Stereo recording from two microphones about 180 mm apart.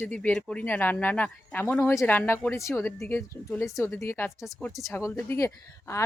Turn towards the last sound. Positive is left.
turn(degrees=15)  # may be behind; listen again after turning